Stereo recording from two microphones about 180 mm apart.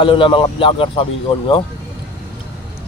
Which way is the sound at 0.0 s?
30° left (ahead or behind).